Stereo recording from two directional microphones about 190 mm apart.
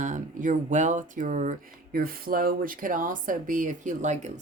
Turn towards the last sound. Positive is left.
turn(degrees=-40)  # may be behind; listen again after turning